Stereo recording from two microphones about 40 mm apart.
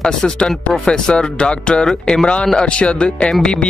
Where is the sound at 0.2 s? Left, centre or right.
Centre.